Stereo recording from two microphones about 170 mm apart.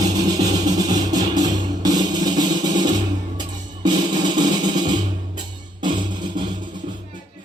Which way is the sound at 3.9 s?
25° right (ahead or behind).